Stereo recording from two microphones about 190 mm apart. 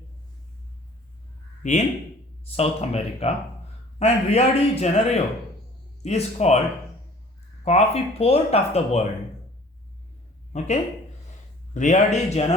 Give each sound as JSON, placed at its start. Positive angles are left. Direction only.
{"t": 1.6, "sound": "speech", "side_deg": 40}
{"t": 7.6, "sound": "speech", "side_deg": 35}
{"t": 10.5, "sound": "speech", "side_deg": 35}
{"t": 11.7, "sound": "speech", "side_deg": 40}